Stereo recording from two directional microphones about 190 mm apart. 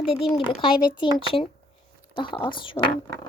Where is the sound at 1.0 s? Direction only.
25° left (ahead or behind).